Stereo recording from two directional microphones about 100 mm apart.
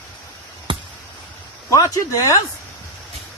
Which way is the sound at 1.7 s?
35° left (ahead or behind).